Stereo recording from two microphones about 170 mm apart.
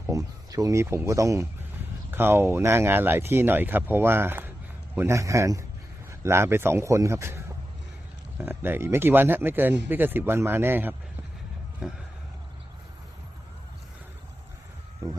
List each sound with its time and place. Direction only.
0.1 s speech: 20° right (ahead or behind); by 12.0 s 5° right (ahead or behind)
15.0 s speech: 20° right (ahead or behind)